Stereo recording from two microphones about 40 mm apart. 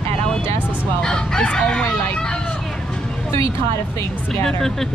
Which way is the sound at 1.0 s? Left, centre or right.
Centre.